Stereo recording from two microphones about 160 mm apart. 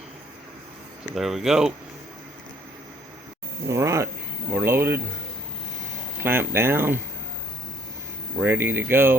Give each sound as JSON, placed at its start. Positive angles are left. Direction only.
{"t": 1.1, "sound": "speech", "side_deg": 0}
{"t": 3.7, "sound": "speech", "side_deg": -20}
{"t": 6.1, "sound": "speech", "side_deg": -15}
{"t": 8.4, "sound": "speech", "side_deg": -10}